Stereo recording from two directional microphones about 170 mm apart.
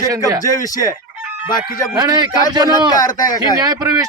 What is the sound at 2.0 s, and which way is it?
Speech, 25° right (ahead or behind).